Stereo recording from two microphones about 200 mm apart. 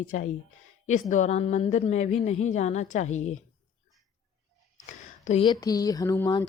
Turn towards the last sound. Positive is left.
turn(degrees=15)  # may be behind; listen again after turning